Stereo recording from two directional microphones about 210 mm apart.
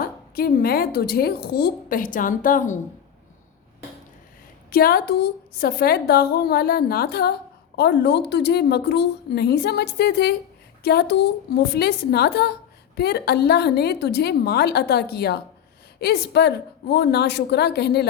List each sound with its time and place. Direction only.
0.0 s a woman's voice: 45° left (ahead or behind)
4.7 s a woman's voice: 45° left (ahead or behind)